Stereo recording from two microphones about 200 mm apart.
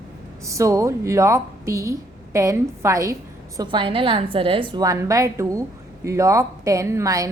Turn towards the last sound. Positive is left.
turn(degrees=-15)  # may be behind; listen again after turning